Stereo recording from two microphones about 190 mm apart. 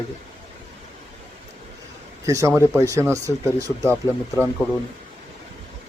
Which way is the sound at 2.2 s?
15° right (ahead or behind).